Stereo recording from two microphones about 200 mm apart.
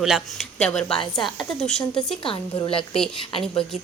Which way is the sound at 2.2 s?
25° left (ahead or behind).